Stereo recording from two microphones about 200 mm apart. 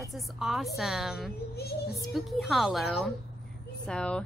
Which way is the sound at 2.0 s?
Centre (ahead or behind).